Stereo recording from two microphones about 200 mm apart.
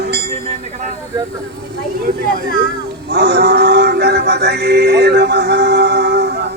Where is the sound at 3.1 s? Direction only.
55° right (ahead or behind).